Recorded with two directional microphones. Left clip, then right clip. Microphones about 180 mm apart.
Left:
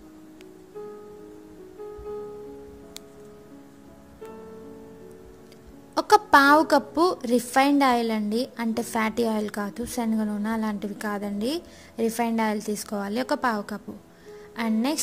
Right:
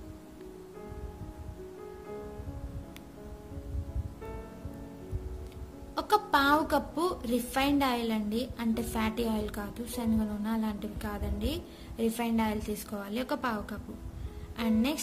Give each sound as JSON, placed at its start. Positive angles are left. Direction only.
{"t": 5.9, "sound": "a woman's voice", "side_deg": 60}